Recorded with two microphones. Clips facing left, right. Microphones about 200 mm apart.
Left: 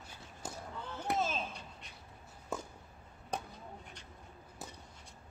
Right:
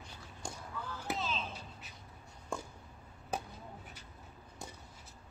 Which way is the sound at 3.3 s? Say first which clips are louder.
Right 1 dB; 5° right (ahead or behind).